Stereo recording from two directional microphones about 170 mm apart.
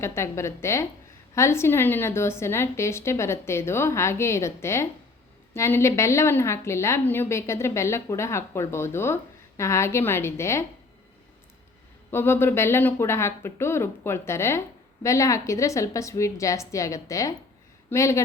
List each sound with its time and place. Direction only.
0.0 s a woman's voice: 15° left (ahead or behind)
12.1 s a woman's voice: 15° left (ahead or behind)